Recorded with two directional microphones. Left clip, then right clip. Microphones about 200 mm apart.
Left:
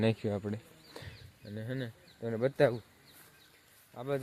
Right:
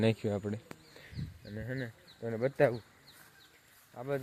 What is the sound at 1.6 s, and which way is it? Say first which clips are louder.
Speech: even; 10° left (ahead or behind).